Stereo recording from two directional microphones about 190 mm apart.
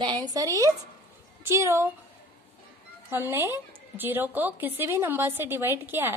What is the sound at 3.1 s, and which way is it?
A woman's voice, 10° right (ahead or behind).